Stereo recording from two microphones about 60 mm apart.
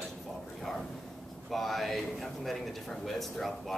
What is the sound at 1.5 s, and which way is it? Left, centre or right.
Speech, centre.